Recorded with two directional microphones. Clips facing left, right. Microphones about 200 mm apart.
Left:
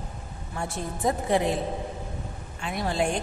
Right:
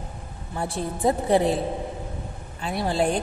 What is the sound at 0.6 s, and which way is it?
Speech, 30° right (ahead or behind).